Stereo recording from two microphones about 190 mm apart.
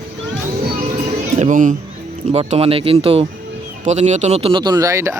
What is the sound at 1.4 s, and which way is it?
Speech, 40° right (ahead or behind).